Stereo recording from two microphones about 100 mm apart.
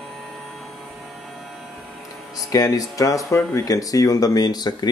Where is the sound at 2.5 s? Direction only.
40° left (ahead or behind).